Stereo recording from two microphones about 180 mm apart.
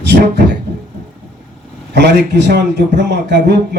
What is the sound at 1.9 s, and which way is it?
A man's voice, 70° right (ahead or behind).